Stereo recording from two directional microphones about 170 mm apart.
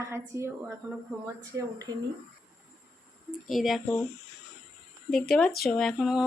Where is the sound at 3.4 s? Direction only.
Centre (ahead or behind).